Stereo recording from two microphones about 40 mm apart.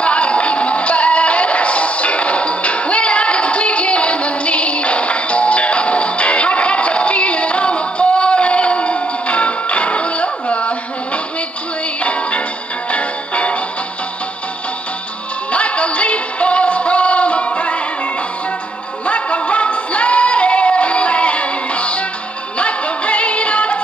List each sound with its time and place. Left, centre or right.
0.0 s music: left
12.0 s music: left
15.5 s music: left